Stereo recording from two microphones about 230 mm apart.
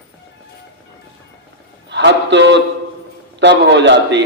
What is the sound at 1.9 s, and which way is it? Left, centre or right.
A man's voice, right.